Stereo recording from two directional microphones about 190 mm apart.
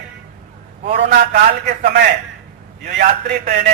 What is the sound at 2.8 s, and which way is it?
Speech, 50° right (ahead or behind).